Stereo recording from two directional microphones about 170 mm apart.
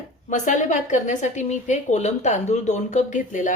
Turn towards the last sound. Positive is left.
turn(degrees=50)  # may be behind; listen again after turning